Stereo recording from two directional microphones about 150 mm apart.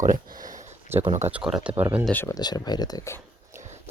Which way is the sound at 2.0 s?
10° left (ahead or behind).